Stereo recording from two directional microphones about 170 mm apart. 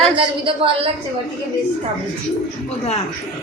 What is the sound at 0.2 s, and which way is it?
Speech, 30° right (ahead or behind).